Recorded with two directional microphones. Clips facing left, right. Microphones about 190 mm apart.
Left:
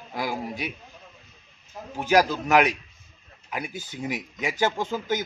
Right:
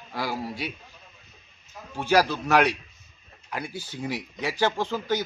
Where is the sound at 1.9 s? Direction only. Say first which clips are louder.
Left 1 dB; 15° left (ahead or behind).